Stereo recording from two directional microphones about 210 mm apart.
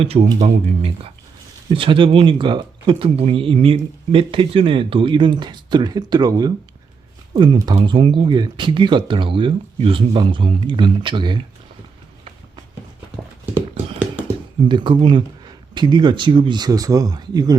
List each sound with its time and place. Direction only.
0.0 s speech: 30° right (ahead or behind)
14.7 s speech: 20° right (ahead or behind)